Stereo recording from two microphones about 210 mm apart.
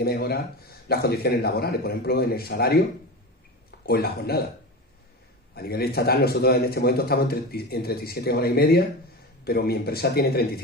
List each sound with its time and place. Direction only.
0.0 s a man's voice: 50° left (ahead or behind)
3.8 s a man's voice: 50° left (ahead or behind)
5.5 s a man's voice: 50° left (ahead or behind)